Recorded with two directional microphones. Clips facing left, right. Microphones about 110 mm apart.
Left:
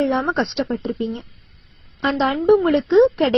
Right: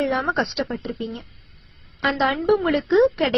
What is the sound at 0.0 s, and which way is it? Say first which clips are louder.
A woman's voice: left 3 dB; 25° left (ahead or behind).